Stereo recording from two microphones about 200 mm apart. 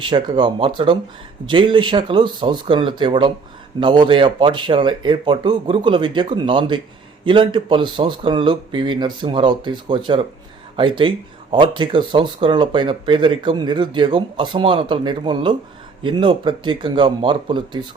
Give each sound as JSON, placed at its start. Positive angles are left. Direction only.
{"t": 0.0, "sound": "speech", "side_deg": -20}